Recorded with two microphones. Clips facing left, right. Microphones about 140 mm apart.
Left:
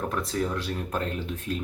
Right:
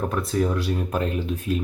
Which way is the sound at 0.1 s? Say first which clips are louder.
Right 5 dB; 10° right (ahead or behind).